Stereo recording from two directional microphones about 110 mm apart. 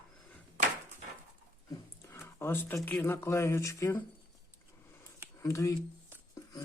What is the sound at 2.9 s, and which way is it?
Speech, 20° left (ahead or behind).